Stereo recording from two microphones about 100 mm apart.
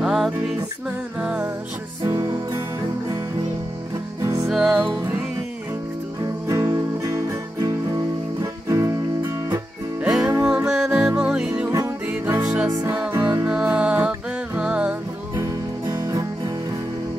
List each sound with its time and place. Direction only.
0.0 s music: 5° right (ahead or behind)
2.0 s music: 35° right (ahead or behind)
4.2 s music: 35° right (ahead or behind)
4.5 s music: centre (ahead or behind)
6.2 s music: 35° right (ahead or behind)
10.0 s music: 10° right (ahead or behind)
12.1 s music: 25° right (ahead or behind)
15.3 s music: 30° right (ahead or behind)